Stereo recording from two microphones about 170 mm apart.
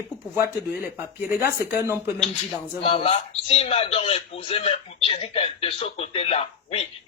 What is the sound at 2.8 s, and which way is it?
Speech, 35° left (ahead or behind).